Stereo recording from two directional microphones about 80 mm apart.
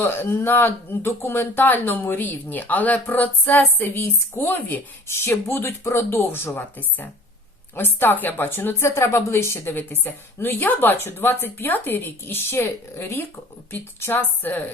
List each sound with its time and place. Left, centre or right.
0.0 s speech: left